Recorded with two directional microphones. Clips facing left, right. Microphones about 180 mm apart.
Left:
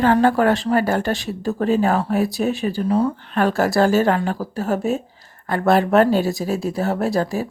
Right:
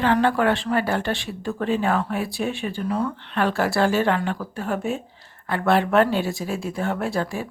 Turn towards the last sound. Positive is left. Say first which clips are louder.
# left 5 dB
turn(degrees=40)  # may be behind; listen again after turning